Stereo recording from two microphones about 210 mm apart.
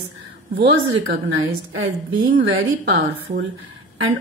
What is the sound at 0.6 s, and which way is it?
A woman's voice, 60° right (ahead or behind).